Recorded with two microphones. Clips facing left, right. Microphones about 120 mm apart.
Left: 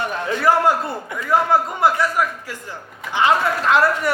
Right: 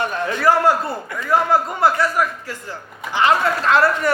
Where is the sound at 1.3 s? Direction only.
20° left (ahead or behind).